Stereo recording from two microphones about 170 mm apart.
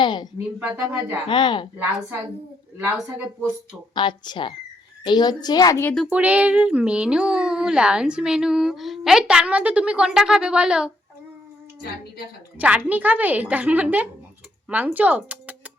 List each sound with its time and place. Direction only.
0.0 s a woman's voice: 25° left (ahead or behind)
0.6 s a woman's voice: 10° right (ahead or behind)
1.3 s a woman's voice: 25° left (ahead or behind)
1.7 s a woman's voice: 10° right (ahead or behind)
3.9 s a woman's voice: 25° left (ahead or behind)
6.1 s speech: 10° right (ahead or behind)
11.8 s a woman's voice: 65° left (ahead or behind)
12.5 s a woman's voice: 10° right (ahead or behind)